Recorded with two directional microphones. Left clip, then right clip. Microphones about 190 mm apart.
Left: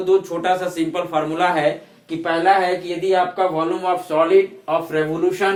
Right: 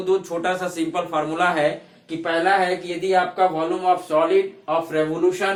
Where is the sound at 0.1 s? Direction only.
10° right (ahead or behind).